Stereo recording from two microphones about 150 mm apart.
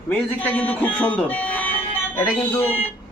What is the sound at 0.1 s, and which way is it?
Speech, 10° left (ahead or behind).